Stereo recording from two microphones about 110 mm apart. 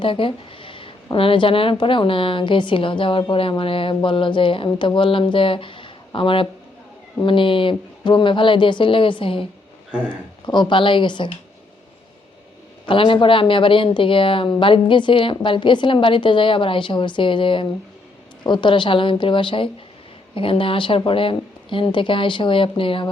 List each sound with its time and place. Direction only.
0.0 s a sound: 50° left (ahead or behind)
1.1 s a woman's voice: 55° left (ahead or behind)
12.9 s a woman's voice: 50° left (ahead or behind)